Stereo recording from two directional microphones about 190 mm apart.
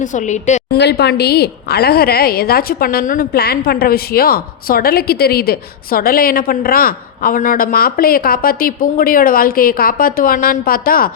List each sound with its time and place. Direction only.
0.0 s a woman's voice: 40° left (ahead or behind)
0.7 s a woman's voice: 60° left (ahead or behind)